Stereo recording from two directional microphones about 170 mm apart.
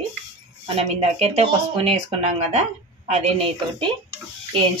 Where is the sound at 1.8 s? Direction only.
40° right (ahead or behind).